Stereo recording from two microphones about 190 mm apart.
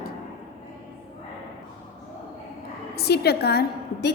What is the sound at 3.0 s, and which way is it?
A woman's voice, 60° left (ahead or behind).